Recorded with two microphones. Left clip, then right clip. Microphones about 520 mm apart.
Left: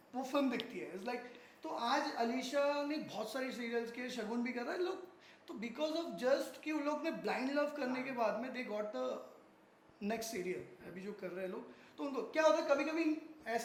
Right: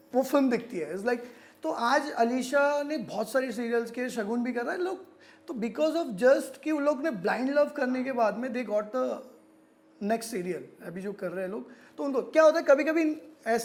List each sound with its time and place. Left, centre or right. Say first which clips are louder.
0.1 s a woman's voice: right 12 dB; right
5.5 s a woman's voice: right 12 dB; right